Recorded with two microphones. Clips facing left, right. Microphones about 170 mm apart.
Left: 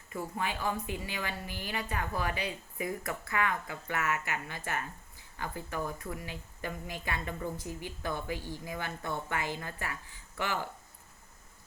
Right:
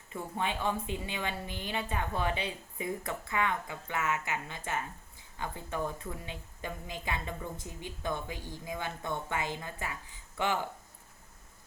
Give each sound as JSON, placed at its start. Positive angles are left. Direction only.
{"t": 0.3, "sound": "a woman's voice", "side_deg": -25}